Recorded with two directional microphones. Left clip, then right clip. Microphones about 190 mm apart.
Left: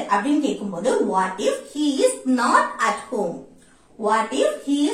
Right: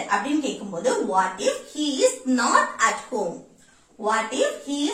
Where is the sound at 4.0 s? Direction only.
10° right (ahead or behind).